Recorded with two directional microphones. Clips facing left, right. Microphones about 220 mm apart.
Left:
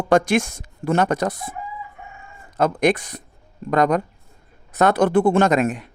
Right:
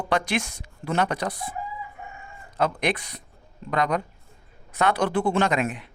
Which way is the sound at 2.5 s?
45° left (ahead or behind).